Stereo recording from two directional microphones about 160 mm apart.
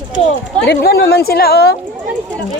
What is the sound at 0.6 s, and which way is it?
A woman's voice, 75° left (ahead or behind).